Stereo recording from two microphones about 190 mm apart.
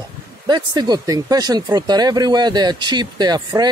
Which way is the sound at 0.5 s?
20° right (ahead or behind).